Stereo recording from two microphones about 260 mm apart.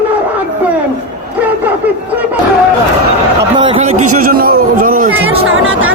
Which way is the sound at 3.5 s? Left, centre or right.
Centre.